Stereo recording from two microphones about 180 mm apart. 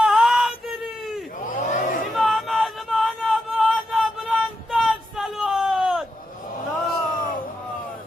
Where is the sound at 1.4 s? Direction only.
45° left (ahead or behind).